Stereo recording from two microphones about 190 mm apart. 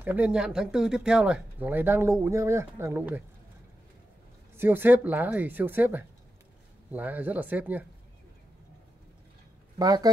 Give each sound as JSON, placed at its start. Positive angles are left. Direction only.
{"t": 0.0, "sound": "speech", "side_deg": -10}
{"t": 4.6, "sound": "speech", "side_deg": -10}
{"t": 9.8, "sound": "speech", "side_deg": -20}